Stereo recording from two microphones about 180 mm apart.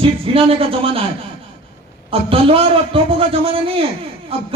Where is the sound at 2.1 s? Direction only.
30° right (ahead or behind).